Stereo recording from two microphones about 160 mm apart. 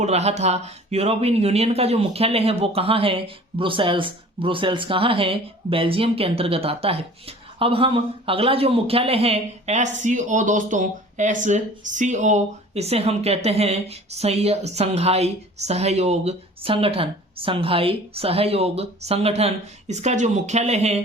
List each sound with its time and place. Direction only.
0.0 s speech: 40° right (ahead or behind)